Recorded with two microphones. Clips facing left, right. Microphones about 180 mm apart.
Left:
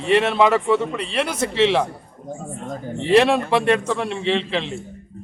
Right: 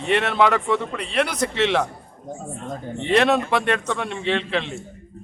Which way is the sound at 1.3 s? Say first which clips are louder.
Left 3 dB; 30° left (ahead or behind).